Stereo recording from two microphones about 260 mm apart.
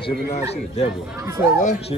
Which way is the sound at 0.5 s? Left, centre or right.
Left.